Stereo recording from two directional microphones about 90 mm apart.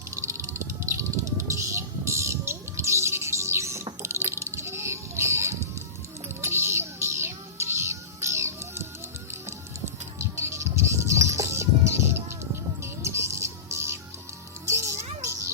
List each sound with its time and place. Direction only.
0.2 s music: 35° right (ahead or behind)
10.2 s music: 30° right (ahead or behind)